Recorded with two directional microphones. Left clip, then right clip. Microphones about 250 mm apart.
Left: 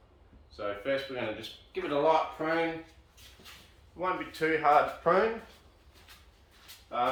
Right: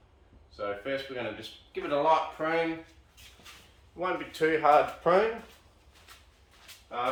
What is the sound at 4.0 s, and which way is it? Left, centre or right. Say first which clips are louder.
Speech: right 2 dB; right.